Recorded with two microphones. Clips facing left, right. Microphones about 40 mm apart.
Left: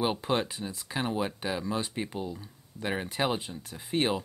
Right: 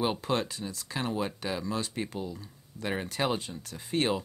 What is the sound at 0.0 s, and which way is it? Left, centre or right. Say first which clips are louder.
Speech: left 1 dB; centre.